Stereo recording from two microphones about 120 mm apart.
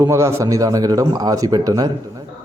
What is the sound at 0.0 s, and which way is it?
A man's voice, 25° right (ahead or behind).